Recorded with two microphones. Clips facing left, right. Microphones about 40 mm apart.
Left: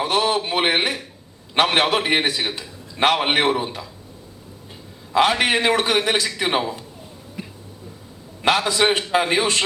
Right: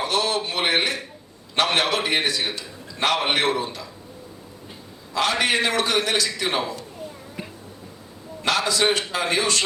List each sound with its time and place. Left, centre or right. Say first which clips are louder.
0.0 s a man's voice: left 3 dB; left
5.1 s a man's voice: left 4 dB; left
7.4 s a sound: left 1 dB; centre
8.4 s a man's voice: left 3 dB; left